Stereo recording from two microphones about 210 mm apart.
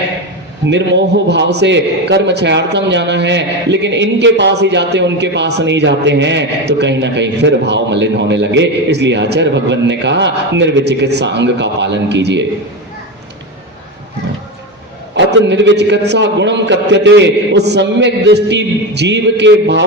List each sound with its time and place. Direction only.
0.6 s a man's voice: 55° right (ahead or behind)
15.1 s a man's voice: 55° right (ahead or behind)